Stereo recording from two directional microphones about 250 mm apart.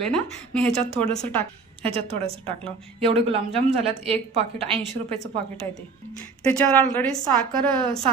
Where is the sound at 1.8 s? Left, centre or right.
Right.